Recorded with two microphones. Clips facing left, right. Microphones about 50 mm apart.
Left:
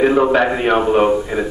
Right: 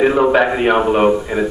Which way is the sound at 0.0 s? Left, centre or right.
Centre.